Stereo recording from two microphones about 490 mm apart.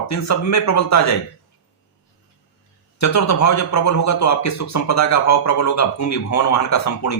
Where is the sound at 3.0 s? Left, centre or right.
Left.